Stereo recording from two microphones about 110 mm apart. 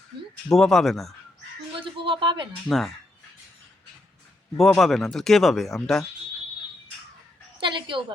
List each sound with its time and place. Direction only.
0.5 s speech: 5° left (ahead or behind)
1.8 s a sound: 50° right (ahead or behind)
2.6 s speech: centre (ahead or behind)
4.5 s speech: centre (ahead or behind)
7.6 s a woman's voice: 50° right (ahead or behind)